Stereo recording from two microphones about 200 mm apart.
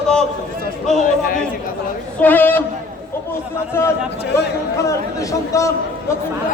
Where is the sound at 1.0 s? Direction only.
45° left (ahead or behind).